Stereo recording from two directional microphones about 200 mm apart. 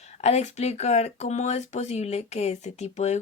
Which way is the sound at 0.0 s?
35° left (ahead or behind).